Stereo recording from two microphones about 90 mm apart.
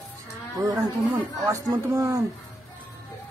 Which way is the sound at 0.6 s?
40° right (ahead or behind).